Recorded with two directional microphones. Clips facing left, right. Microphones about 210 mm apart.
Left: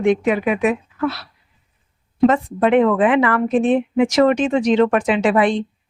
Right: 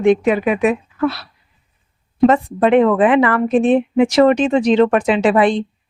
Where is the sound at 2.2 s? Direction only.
35° right (ahead or behind).